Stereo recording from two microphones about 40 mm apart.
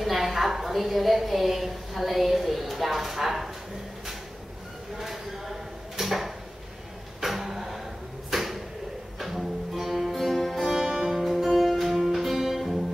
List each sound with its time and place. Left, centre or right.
0.0 s a woman's voice: centre
4.9 s a sound: centre
9.2 s music: centre
10.7 s music: centre